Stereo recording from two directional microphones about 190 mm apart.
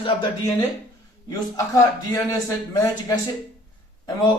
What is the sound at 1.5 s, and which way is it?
Speech, 20° left (ahead or behind).